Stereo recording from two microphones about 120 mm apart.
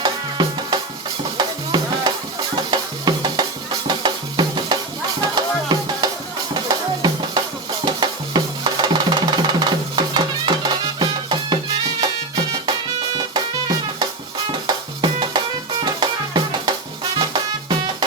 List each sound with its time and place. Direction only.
0.0 s music: 35° right (ahead or behind)
6.5 s drum: 40° right (ahead or behind)
13.1 s music: 35° right (ahead or behind)
15.8 s drum: 35° right (ahead or behind)
17.2 s music: 40° right (ahead or behind)